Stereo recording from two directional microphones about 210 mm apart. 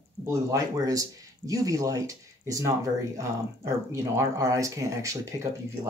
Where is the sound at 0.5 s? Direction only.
15° right (ahead or behind).